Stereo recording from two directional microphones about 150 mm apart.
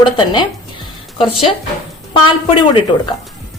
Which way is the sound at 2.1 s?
35° left (ahead or behind).